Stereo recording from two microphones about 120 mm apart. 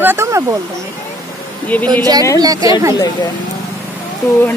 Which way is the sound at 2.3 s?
30° right (ahead or behind).